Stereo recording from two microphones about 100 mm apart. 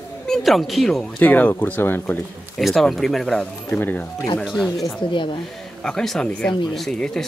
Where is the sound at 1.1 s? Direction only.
15° left (ahead or behind).